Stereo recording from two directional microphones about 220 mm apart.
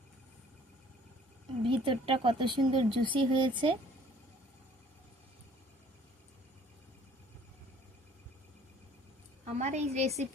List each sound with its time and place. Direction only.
1.6 s speech: 25° right (ahead or behind)
9.4 s a woman's voice: 30° right (ahead or behind)